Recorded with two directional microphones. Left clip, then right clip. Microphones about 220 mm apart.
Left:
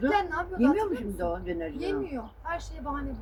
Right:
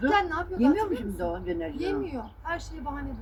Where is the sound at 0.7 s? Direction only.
15° left (ahead or behind).